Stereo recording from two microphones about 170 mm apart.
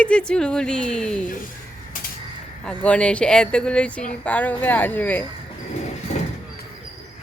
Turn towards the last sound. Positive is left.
turn(degrees=40)  # may be behind; listen again after turning